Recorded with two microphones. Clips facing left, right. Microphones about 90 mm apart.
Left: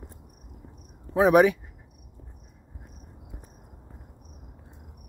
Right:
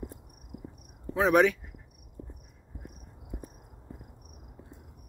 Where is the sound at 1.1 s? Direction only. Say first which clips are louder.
Left 4 dB; 10° left (ahead or behind).